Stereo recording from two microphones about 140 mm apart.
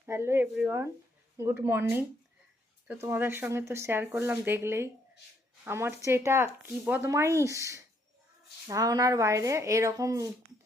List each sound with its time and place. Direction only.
0.0 s speech: 20° right (ahead or behind)